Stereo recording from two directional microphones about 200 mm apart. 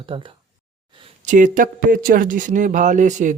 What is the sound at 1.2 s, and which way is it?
Speech, 40° right (ahead or behind).